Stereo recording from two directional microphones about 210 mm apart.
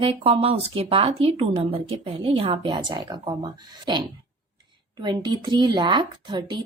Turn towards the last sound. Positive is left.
turn(degrees=-20)  # may be behind; listen again after turning